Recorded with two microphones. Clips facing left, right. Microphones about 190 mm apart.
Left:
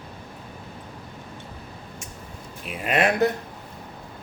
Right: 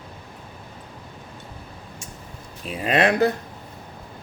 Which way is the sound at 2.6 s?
35° right (ahead or behind).